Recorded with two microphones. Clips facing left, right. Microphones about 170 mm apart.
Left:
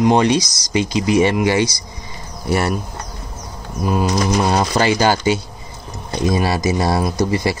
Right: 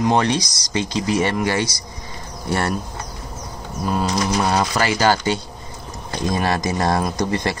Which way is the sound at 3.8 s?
15° left (ahead or behind).